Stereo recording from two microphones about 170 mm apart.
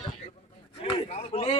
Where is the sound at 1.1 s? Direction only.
35° left (ahead or behind).